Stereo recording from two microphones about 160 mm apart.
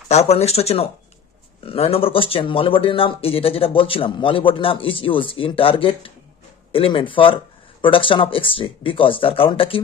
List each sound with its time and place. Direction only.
0.1 s speech: 40° left (ahead or behind)